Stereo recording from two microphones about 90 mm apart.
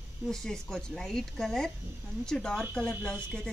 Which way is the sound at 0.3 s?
5° left (ahead or behind).